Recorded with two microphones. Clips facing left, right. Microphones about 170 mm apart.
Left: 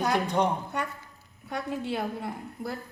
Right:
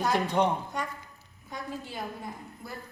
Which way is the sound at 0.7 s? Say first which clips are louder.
Left 2 dB; 65° left (ahead or behind).